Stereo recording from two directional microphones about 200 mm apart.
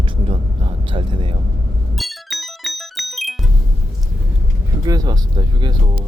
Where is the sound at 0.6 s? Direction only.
25° right (ahead or behind).